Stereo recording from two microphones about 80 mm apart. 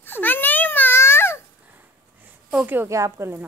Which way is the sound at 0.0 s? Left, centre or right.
Left.